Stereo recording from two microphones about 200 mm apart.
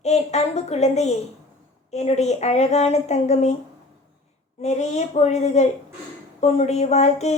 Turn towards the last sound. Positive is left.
turn(degrees=35)  # may be behind; listen again after turning